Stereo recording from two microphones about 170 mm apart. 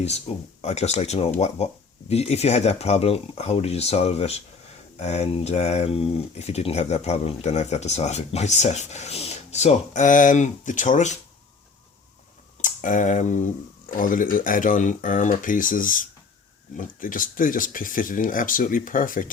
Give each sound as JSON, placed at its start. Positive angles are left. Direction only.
{"t": 0.0, "sound": "speech", "side_deg": 40}
{"t": 12.6, "sound": "speech", "side_deg": 50}